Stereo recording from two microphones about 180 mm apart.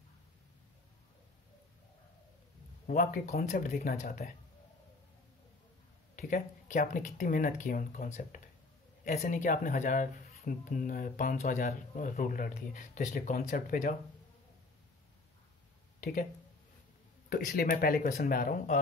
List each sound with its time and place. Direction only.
2.9 s speech: 50° left (ahead or behind)
6.1 s speech: 50° left (ahead or behind)
16.0 s speech: 50° left (ahead or behind)
17.3 s speech: 55° left (ahead or behind)